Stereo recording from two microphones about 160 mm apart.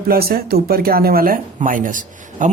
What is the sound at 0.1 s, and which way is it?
Speech, 70° right (ahead or behind).